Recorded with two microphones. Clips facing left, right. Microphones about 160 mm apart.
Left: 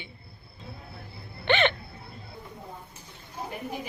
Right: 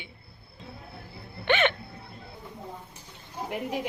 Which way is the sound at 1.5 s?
10° right (ahead or behind).